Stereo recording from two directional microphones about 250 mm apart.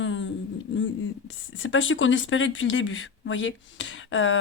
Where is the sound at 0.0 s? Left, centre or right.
Left.